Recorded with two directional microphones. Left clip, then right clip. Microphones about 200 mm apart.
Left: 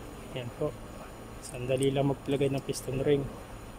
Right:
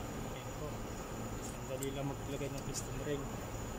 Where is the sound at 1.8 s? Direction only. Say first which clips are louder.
Left 13 dB; 50° left (ahead or behind).